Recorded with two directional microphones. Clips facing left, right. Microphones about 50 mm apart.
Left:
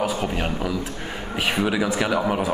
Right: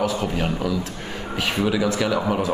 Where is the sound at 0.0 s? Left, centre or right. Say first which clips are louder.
Right 1 dB; centre.